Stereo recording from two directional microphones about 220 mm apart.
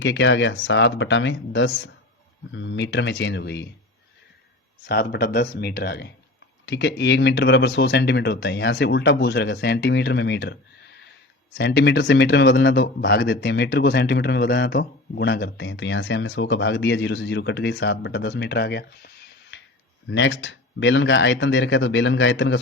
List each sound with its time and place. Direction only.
0.0 s speech: 55° left (ahead or behind)
4.9 s speech: 45° left (ahead or behind)